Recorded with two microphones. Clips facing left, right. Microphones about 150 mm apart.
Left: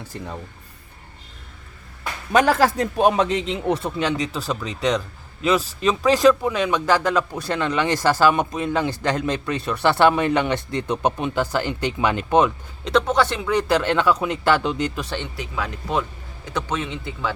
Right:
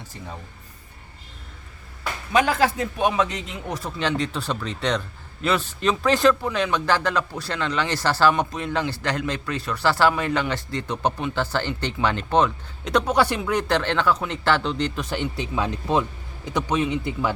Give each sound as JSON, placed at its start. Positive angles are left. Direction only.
{"t": 2.3, "sound": "a man's voice", "side_deg": 45}
{"t": 3.4, "sound": "speech", "side_deg": 25}
{"t": 4.4, "sound": "a man's voice", "side_deg": 5}
{"t": 12.8, "sound": "a man's voice", "side_deg": -5}
{"t": 15.1, "sound": "speech", "side_deg": -15}